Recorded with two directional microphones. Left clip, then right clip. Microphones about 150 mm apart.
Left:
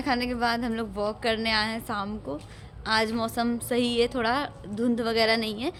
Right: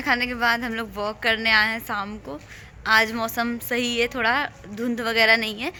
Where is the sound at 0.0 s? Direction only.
10° left (ahead or behind).